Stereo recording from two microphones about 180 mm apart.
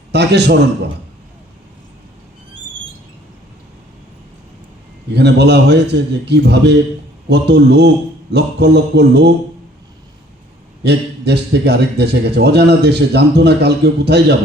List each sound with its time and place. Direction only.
0.1 s a man's voice: 70° right (ahead or behind)
5.1 s a man's voice: 70° right (ahead or behind)
10.8 s a man's voice: 65° right (ahead or behind)